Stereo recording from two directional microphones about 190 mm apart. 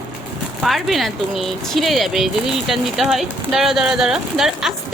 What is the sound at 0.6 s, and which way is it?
Speech, centre (ahead or behind).